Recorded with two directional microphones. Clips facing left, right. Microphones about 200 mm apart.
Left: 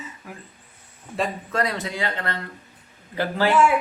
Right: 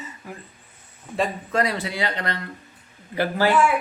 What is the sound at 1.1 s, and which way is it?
Speech, 5° right (ahead or behind).